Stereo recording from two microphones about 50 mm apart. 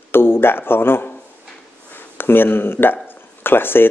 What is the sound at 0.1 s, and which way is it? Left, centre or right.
Speech, left.